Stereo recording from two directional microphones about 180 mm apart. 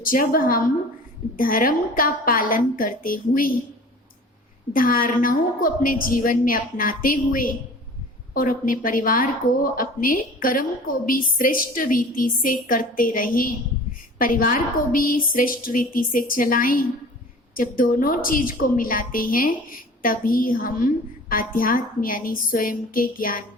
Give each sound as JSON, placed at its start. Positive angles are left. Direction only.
{"t": 0.0, "sound": "a woman's voice", "side_deg": 50}
{"t": 4.7, "sound": "a woman's voice", "side_deg": 50}